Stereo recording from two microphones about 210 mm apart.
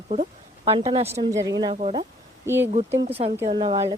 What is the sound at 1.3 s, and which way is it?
Speech, 15° right (ahead or behind).